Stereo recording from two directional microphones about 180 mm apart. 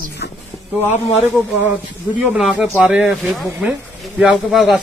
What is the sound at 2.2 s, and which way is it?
Speech, 5° right (ahead or behind).